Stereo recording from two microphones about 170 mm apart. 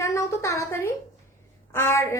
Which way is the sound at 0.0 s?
20° left (ahead or behind).